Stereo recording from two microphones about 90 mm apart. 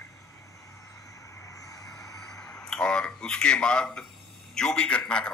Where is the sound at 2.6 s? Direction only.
10° left (ahead or behind).